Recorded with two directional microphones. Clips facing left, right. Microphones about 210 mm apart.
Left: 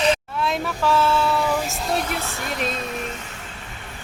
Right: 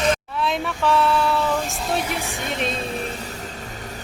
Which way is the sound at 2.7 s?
30° right (ahead or behind).